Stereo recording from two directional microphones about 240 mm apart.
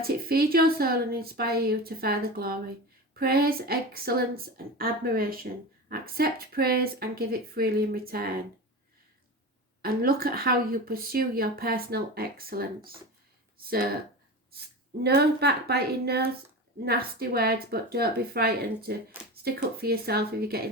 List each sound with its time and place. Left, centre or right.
0.0 s a woman's voice: right
9.8 s a woman's voice: right
15.0 s a woman's voice: right
19.1 s speech: centre
19.8 s a woman's voice: right